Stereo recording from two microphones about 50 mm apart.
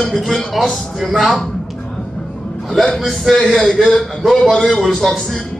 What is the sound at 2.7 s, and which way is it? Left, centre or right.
Speech, centre.